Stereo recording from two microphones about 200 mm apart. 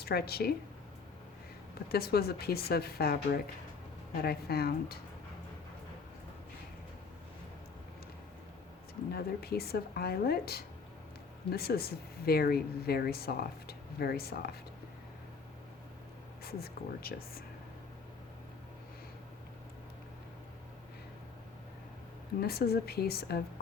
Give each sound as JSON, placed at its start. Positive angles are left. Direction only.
{"t": 0.0, "sound": "speech", "side_deg": 50}
{"t": 1.9, "sound": "speech", "side_deg": 50}
{"t": 4.2, "sound": "speech", "side_deg": 50}
{"t": 9.1, "sound": "speech", "side_deg": 50}
{"t": 16.4, "sound": "speech", "side_deg": 50}
{"t": 22.4, "sound": "speech", "side_deg": 50}